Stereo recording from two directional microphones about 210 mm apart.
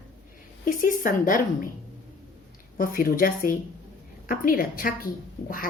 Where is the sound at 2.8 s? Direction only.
45° left (ahead or behind).